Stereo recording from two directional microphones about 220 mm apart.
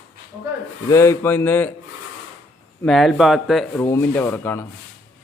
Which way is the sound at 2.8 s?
Centre (ahead or behind).